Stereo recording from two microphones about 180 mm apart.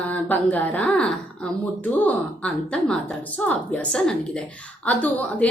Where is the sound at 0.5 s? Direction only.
10° left (ahead or behind).